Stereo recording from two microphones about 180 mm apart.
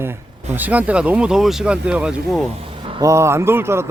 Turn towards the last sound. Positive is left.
turn(degrees=-15)  # may be behind; listen again after turning